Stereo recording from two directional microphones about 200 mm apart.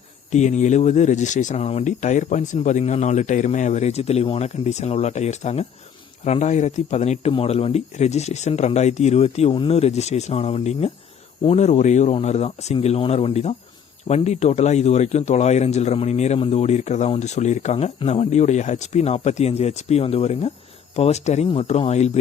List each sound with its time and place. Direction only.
0.3 s speech: 35° left (ahead or behind)